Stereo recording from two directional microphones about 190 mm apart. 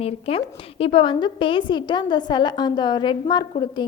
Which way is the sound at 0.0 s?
30° left (ahead or behind).